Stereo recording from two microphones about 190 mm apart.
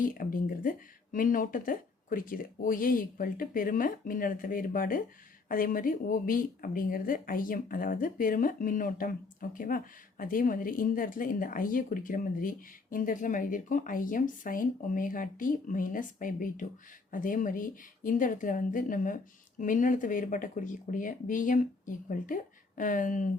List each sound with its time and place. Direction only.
0.0 s speech: 45° left (ahead or behind)